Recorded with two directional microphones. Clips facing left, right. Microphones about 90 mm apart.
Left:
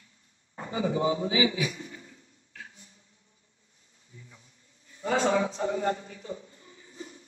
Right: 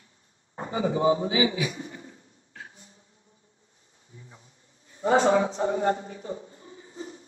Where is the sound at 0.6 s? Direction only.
30° right (ahead or behind).